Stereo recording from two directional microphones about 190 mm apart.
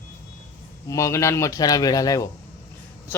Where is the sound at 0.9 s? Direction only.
15° left (ahead or behind).